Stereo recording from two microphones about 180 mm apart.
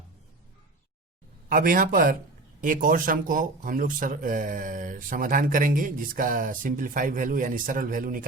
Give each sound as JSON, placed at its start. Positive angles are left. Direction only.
{"t": 1.5, "sound": "speech", "side_deg": -50}